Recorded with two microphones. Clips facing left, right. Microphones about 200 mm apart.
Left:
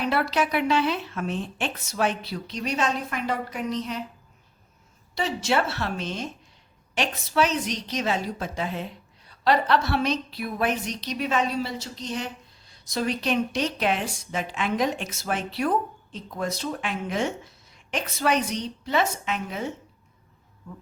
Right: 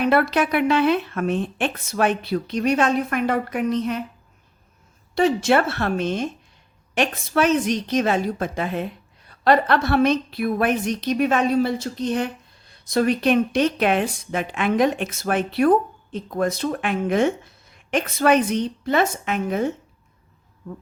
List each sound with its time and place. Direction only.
0.0 s a woman's voice: 55° right (ahead or behind)
5.1 s a woman's voice: 55° right (ahead or behind)